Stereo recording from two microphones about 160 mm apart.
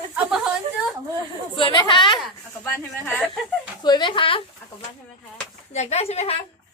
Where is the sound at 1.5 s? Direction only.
30° left (ahead or behind).